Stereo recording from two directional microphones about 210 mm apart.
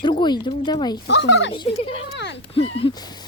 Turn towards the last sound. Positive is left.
turn(degrees=25)  # may be behind; listen again after turning